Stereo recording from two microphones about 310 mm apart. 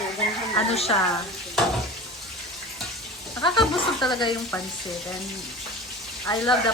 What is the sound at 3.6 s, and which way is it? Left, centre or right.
Speech, centre.